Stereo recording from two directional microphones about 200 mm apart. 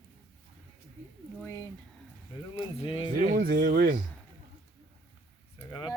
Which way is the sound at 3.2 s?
45° right (ahead or behind).